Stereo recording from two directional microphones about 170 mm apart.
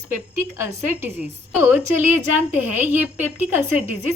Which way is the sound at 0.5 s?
15° right (ahead or behind).